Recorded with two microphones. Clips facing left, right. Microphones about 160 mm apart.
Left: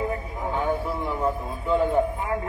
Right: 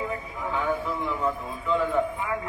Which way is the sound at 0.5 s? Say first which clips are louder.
Left 2 dB; 40° left (ahead or behind).